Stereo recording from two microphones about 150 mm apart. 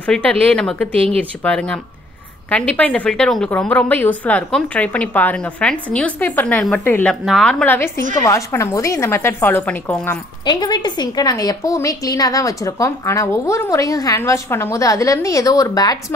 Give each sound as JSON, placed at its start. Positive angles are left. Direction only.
{"t": 0.0, "sound": "a woman's voice", "side_deg": 10}
{"t": 0.9, "sound": "speech", "side_deg": -40}
{"t": 1.4, "sound": "a woman's voice", "side_deg": 5}
{"t": 7.2, "sound": "a woman's voice", "side_deg": 0}
{"t": 10.4, "sound": "a woman's voice", "side_deg": 30}